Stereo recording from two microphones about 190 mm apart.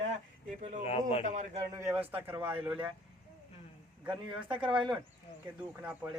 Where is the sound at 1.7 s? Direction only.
10° right (ahead or behind).